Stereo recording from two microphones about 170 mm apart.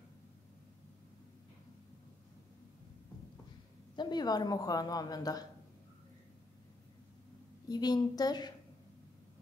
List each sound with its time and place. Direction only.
3.9 s a woman's voice: 25° left (ahead or behind)
7.6 s a woman's voice: 25° left (ahead or behind)